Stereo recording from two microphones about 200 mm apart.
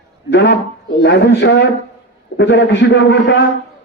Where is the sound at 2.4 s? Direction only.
65° left (ahead or behind).